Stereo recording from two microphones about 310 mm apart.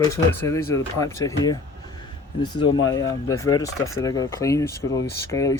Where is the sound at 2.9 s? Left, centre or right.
Centre.